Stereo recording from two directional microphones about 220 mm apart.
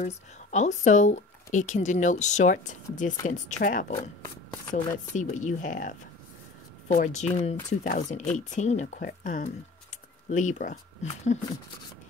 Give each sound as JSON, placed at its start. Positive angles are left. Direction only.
{"t": 0.0, "sound": "speech", "side_deg": 30}
{"t": 5.1, "sound": "speech", "side_deg": 35}